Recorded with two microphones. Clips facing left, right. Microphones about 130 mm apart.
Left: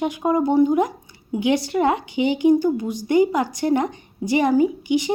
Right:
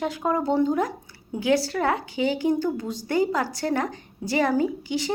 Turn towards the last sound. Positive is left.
turn(degrees=15)  # may be behind; listen again after turning